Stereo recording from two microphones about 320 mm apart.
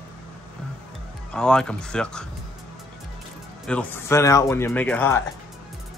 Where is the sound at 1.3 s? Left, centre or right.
Centre.